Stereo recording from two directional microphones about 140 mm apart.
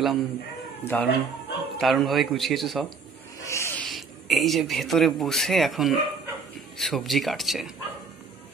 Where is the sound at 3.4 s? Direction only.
20° left (ahead or behind).